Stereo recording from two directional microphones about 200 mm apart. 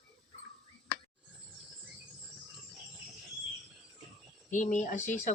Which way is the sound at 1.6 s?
5° right (ahead or behind).